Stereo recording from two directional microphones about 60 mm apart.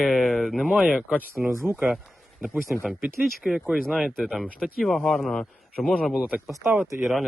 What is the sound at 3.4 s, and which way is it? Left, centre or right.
Speech, centre.